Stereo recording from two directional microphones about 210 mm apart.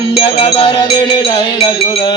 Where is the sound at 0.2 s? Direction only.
30° left (ahead or behind).